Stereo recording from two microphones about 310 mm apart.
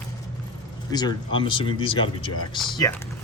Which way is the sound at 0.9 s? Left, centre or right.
Centre.